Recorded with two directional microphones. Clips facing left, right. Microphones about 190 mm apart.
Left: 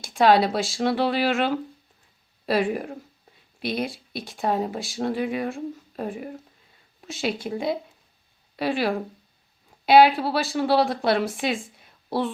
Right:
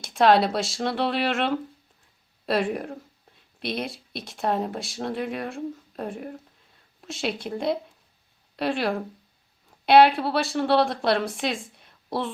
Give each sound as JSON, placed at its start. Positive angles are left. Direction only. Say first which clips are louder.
{"t": 0.0, "sound": "speech", "louder": "left 1 dB", "side_deg": 0}